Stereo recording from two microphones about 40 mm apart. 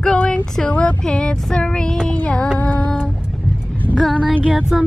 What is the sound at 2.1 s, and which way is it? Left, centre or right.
Child singing, left.